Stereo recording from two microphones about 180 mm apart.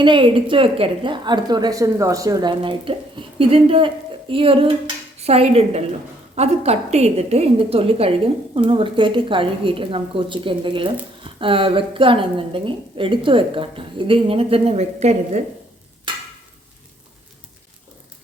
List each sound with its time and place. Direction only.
0.0 s a woman's voice: 30° right (ahead or behind)